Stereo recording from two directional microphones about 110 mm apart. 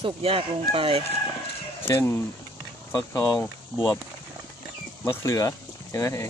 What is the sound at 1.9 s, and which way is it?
Speech, 25° left (ahead or behind).